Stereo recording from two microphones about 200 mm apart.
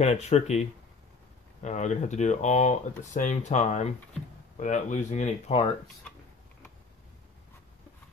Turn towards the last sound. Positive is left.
turn(degrees=5)  # may be behind; listen again after turning